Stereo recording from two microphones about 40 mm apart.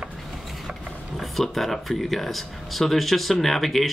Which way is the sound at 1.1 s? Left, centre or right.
Centre.